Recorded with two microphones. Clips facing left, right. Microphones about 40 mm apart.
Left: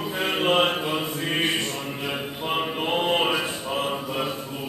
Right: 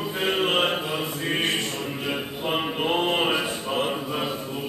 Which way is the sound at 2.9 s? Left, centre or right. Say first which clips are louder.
Left 2 dB; centre.